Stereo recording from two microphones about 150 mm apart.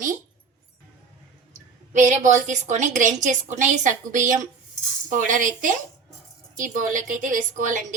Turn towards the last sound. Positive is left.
turn(degrees=-60)  # may be behind; listen again after turning